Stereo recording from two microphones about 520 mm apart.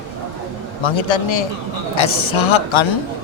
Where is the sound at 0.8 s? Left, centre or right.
Left.